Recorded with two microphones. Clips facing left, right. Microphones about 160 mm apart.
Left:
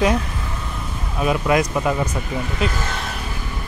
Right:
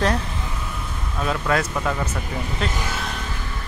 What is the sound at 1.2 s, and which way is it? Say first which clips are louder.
Speech: left 4 dB; 15° left (ahead or behind).